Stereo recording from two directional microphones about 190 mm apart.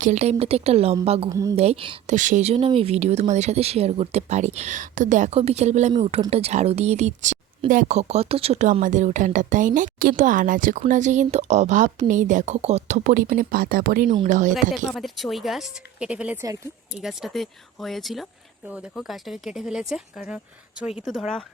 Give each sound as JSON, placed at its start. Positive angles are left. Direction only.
{"t": 0.0, "sound": "speech", "side_deg": -35}
{"t": 1.3, "sound": "a woman's voice", "side_deg": -15}
{"t": 1.5, "sound": "a woman's voice", "side_deg": -30}
{"t": 2.0, "sound": "speech", "side_deg": -40}
{"t": 14.8, "sound": "speech", "side_deg": 0}